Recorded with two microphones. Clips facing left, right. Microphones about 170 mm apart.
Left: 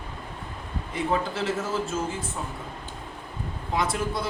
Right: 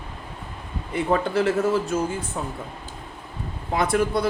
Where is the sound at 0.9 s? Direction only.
60° right (ahead or behind).